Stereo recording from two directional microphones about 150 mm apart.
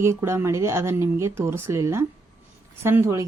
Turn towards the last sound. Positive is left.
turn(degrees=-15)  # may be behind; listen again after turning